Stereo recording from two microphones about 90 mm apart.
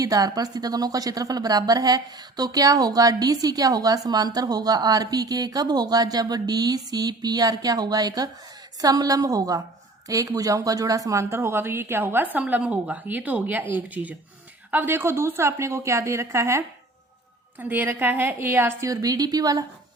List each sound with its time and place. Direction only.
0.0 s a woman's voice: 45° right (ahead or behind)
17.6 s speech: 20° right (ahead or behind)
18.9 s a woman's voice: 40° right (ahead or behind)